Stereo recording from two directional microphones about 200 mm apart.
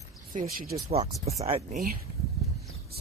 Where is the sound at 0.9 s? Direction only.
30° right (ahead or behind).